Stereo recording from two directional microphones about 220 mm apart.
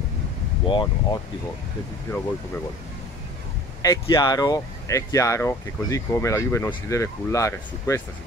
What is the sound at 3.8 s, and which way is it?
Speech, 15° left (ahead or behind).